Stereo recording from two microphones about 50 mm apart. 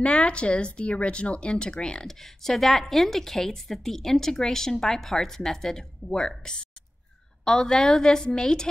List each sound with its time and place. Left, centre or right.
0.0 s speech: left
2.0 s a woman's voice: centre